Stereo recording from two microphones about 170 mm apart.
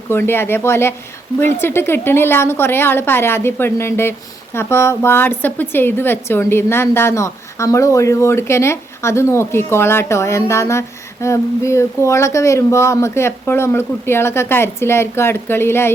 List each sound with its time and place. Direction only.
0.1 s a woman's voice: 15° left (ahead or behind)